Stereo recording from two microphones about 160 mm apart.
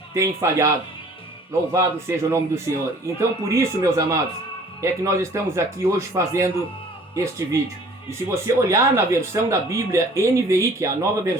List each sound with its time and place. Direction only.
0.1 s speech: 20° right (ahead or behind)
1.7 s speech: 15° right (ahead or behind)